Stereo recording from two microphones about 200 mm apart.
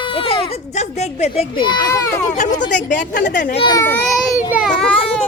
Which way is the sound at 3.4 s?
45° left (ahead or behind).